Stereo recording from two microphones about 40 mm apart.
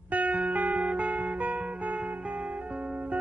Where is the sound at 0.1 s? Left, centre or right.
Right.